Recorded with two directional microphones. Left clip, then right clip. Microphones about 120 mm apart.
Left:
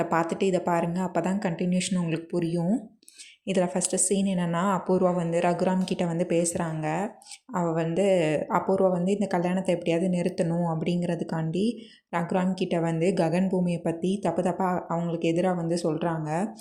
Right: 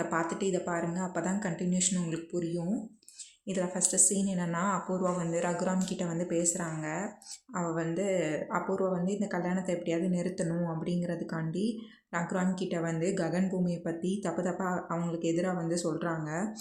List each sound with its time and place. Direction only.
0.0 s speech: 45° left (ahead or behind)